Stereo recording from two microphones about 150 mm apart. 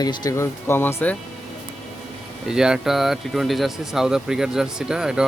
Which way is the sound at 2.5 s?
5° right (ahead or behind).